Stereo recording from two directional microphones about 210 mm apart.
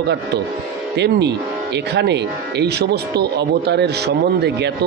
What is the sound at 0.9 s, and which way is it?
Speech, 55° right (ahead or behind).